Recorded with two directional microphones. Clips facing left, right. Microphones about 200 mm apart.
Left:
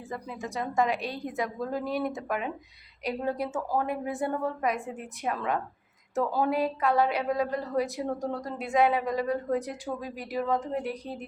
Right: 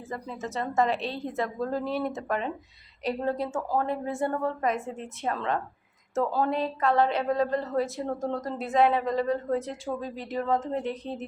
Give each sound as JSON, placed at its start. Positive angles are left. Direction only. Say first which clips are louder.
{"t": 0.4, "sound": "a woman's voice", "louder": "right 1 dB", "side_deg": 15}